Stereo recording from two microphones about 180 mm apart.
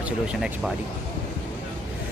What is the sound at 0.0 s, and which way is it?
Speech, 5° right (ahead or behind).